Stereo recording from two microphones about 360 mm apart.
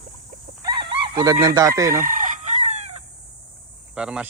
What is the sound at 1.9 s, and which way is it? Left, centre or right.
Chicken, right.